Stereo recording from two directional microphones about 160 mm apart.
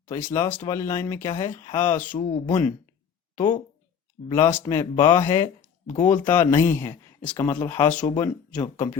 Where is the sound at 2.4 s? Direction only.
25° left (ahead or behind).